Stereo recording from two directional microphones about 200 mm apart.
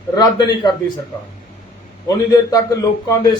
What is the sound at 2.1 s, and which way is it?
A man's voice, 20° left (ahead or behind).